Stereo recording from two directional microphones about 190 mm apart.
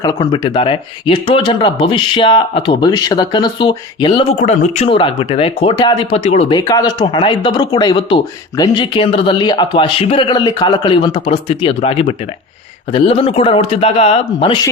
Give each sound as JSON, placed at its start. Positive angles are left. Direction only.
{"t": 0.0, "sound": "speech", "side_deg": 20}
{"t": 6.6, "sound": "speech", "side_deg": 20}